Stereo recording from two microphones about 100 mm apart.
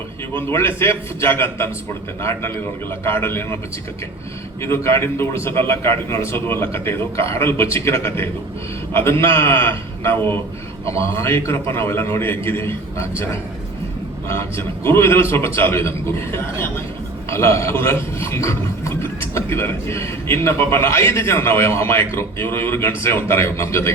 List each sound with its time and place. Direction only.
0.3 s speech: 25° left (ahead or behind)
3.0 s speech: 25° left (ahead or behind)
4.6 s speech: 25° left (ahead or behind)
14.3 s speech: 25° left (ahead or behind)
17.2 s speech: 25° left (ahead or behind)